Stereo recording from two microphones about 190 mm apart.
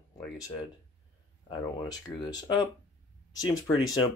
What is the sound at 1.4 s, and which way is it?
Speech, 20° left (ahead or behind).